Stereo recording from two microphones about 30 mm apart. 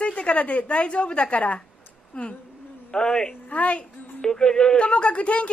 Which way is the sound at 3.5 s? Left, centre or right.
Left.